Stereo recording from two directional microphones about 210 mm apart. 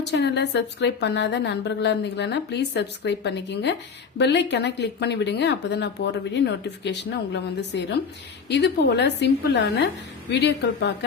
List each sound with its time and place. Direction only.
0.0 s a woman's voice: 55° left (ahead or behind)